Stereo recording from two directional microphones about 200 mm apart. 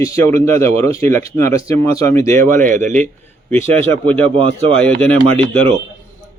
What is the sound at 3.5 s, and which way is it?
Speech, 10° left (ahead or behind).